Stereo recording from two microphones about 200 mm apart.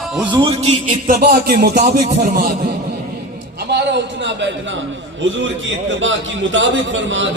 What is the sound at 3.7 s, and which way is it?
Speech, 60° right (ahead or behind).